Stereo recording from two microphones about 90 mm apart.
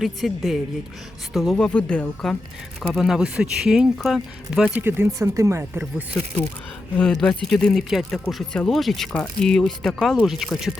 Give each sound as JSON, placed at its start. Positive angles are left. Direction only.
{"t": 0.0, "sound": "speech", "side_deg": 0}
{"t": 2.9, "sound": "speech", "side_deg": 0}
{"t": 4.8, "sound": "speech", "side_deg": -25}
{"t": 6.9, "sound": "speech", "side_deg": 5}